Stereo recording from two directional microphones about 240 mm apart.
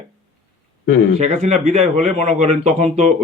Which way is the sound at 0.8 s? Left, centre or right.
Left.